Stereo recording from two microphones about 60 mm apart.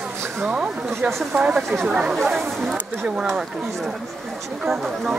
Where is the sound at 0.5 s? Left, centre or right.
Right.